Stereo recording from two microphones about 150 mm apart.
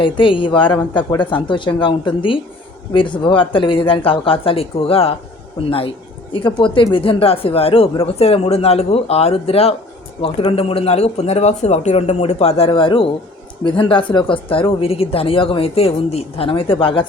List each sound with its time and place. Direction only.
0.0 s speech: 35° left (ahead or behind)
6.6 s speech: 35° left (ahead or behind)